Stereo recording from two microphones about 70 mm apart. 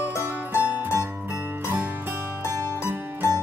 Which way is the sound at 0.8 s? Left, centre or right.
Right.